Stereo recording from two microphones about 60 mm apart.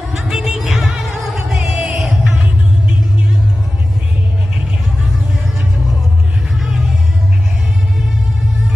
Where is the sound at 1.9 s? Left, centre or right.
Centre.